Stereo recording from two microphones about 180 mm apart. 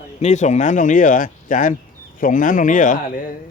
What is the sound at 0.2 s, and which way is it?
Speech, 40° left (ahead or behind).